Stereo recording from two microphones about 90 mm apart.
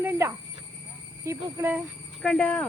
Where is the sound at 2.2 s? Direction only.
10° left (ahead or behind).